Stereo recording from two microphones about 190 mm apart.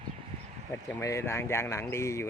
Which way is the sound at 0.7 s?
15° left (ahead or behind).